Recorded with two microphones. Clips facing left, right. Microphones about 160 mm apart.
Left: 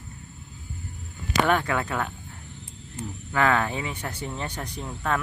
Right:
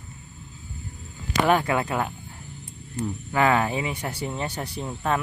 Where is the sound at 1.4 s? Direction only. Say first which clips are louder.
Right 2 dB; 10° right (ahead or behind).